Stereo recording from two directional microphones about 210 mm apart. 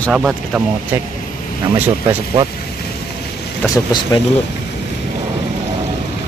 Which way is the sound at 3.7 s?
20° left (ahead or behind).